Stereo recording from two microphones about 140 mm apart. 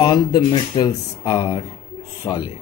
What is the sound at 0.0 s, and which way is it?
Speech, 30° left (ahead or behind).